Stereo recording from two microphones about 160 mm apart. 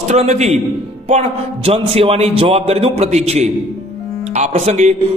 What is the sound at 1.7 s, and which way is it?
A man's voice, 35° right (ahead or behind).